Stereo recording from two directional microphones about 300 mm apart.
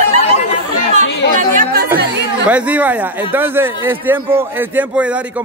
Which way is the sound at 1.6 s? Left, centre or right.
Right.